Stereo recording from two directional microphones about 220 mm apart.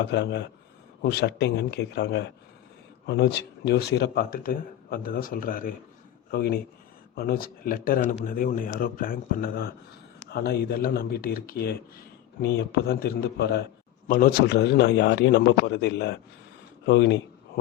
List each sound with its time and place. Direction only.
0.0 s speech: 50° left (ahead or behind)